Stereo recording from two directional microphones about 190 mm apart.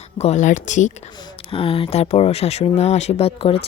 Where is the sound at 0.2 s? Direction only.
35° left (ahead or behind).